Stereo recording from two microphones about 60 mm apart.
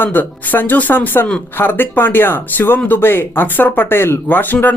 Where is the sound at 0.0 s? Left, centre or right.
Left.